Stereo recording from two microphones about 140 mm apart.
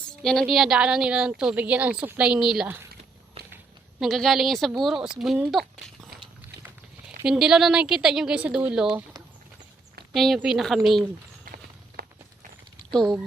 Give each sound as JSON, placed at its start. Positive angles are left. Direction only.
{"t": 0.0, "sound": "a woman's voice", "side_deg": 5}
{"t": 4.0, "sound": "a woman's voice", "side_deg": 0}
{"t": 7.3, "sound": "a woman's voice", "side_deg": -5}
{"t": 10.1, "sound": "a woman's voice", "side_deg": 0}
{"t": 11.4, "sound": "clip-clop", "side_deg": -90}
{"t": 12.9, "sound": "speech", "side_deg": 5}